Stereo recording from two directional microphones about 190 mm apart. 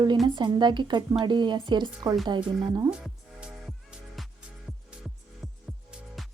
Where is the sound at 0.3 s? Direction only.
25° right (ahead or behind).